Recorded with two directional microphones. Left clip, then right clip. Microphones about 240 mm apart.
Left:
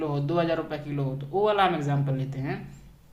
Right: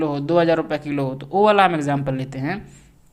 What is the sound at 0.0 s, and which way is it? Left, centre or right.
Speech, right.